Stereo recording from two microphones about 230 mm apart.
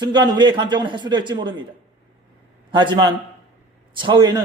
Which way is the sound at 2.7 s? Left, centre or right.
Centre.